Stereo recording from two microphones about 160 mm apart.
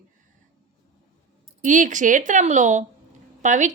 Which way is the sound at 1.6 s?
50° right (ahead or behind).